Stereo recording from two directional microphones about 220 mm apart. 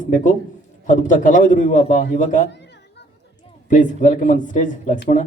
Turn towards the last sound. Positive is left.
turn(degrees=35)  # may be behind; listen again after turning